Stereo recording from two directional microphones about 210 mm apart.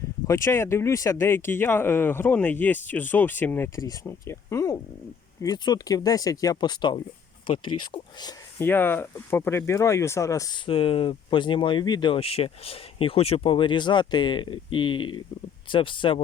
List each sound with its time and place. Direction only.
0.3 s speech: 15° left (ahead or behind)